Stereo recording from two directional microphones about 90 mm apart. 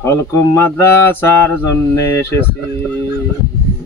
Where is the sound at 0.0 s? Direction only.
35° left (ahead or behind).